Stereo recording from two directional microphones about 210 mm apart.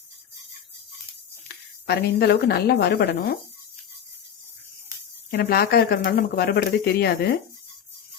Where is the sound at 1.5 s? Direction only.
50° left (ahead or behind).